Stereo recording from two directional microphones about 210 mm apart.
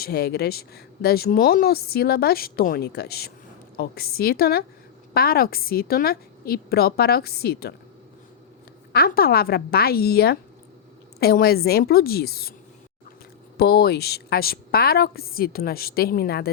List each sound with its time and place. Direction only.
0.0 s a woman's voice: 50° left (ahead or behind)
8.9 s a woman's voice: 45° left (ahead or behind)
13.6 s a woman's voice: 50° left (ahead or behind)